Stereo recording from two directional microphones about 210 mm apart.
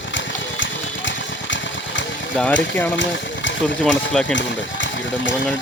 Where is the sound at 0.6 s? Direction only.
60° left (ahead or behind).